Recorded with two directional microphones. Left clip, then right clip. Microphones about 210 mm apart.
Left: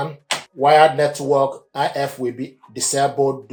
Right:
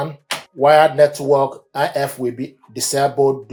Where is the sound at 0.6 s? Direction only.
35° right (ahead or behind).